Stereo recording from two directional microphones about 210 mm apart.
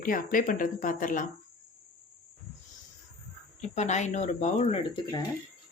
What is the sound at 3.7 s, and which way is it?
Speech, 35° left (ahead or behind).